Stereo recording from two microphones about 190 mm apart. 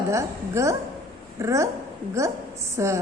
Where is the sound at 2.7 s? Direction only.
15° right (ahead or behind).